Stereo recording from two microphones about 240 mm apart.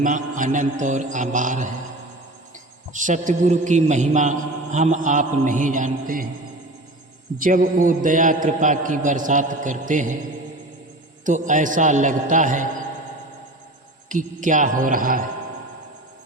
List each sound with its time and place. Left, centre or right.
0.0 s mantra: right
2.9 s mantra: right
7.3 s mantra: right
11.3 s mantra: right
14.1 s mantra: right